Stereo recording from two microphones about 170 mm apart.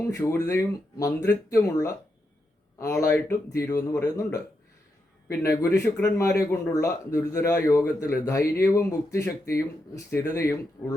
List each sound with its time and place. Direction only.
0.0 s speech: 20° left (ahead or behind)